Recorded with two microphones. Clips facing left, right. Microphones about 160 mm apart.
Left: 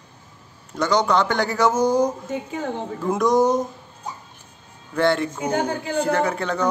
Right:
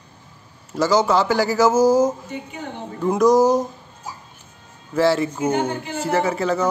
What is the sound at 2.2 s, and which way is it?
Speech, 90° left.